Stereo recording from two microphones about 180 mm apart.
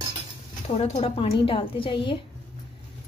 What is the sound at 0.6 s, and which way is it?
A woman's voice, 35° left (ahead or behind).